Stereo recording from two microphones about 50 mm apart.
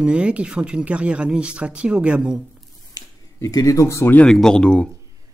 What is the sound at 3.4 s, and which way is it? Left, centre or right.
Speech, left.